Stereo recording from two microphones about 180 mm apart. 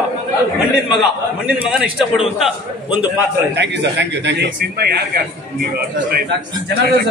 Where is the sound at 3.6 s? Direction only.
75° right (ahead or behind).